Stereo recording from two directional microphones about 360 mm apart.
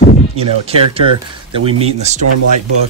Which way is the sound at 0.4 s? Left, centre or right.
Centre.